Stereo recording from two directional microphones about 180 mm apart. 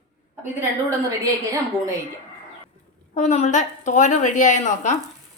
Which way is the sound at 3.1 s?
40° left (ahead or behind).